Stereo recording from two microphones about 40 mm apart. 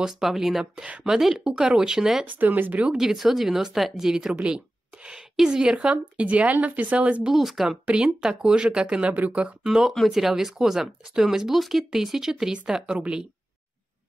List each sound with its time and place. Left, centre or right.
0.0 s speech: centre
1.9 s speech: centre
2.2 s speech: right
3.0 s speech: centre
4.1 s speech: centre; by 6.5 s right
6.5 s speech: right
6.9 s speech: right
7.2 s speech: centre
7.8 s speech: right
9.7 s speech: centre
12.9 s speech: right